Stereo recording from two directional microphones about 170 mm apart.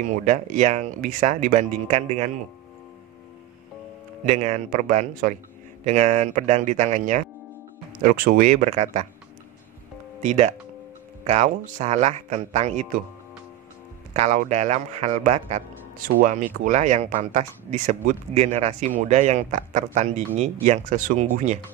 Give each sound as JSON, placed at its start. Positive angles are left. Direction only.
{"t": 0.0, "sound": "speech", "side_deg": -45}
{"t": 4.3, "sound": "speech", "side_deg": -50}
{"t": 5.9, "sound": "speech", "side_deg": -45}
{"t": 8.0, "sound": "speech", "side_deg": -60}
{"t": 10.2, "sound": "a man's voice", "side_deg": -40}
{"t": 14.1, "sound": "a man's voice", "side_deg": -45}
{"t": 16.2, "sound": "speech", "side_deg": -50}